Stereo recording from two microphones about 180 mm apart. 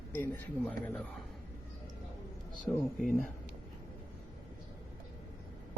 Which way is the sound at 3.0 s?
45° left (ahead or behind).